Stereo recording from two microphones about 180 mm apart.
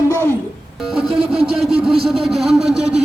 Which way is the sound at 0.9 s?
Centre (ahead or behind).